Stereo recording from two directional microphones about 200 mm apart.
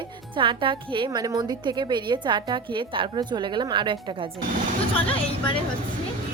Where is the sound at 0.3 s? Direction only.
25° right (ahead or behind).